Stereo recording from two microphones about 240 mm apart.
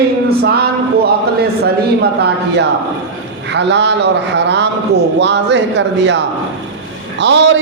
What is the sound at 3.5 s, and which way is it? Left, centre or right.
A man's voice, right.